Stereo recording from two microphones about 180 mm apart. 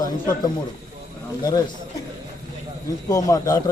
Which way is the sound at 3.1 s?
20° left (ahead or behind).